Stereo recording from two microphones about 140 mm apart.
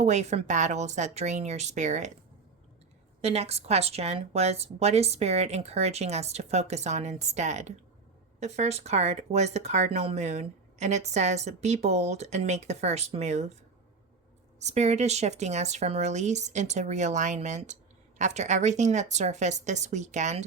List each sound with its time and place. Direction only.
0.0 s speech: 55° right (ahead or behind)
3.2 s speech: 50° right (ahead or behind)
14.6 s speech: 55° right (ahead or behind)